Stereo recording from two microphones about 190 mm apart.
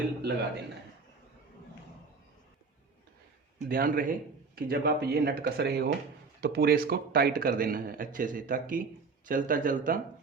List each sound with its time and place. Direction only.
0.2 s speech: 55° right (ahead or behind)
3.7 s speech: 45° right (ahead or behind)